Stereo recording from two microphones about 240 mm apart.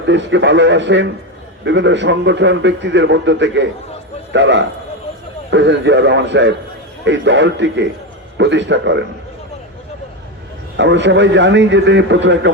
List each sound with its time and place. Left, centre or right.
0.0 s a man's voice: right
10.8 s a man's voice: right